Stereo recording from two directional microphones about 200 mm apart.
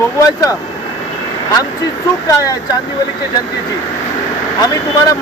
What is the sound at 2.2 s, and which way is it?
Speech, 15° left (ahead or behind).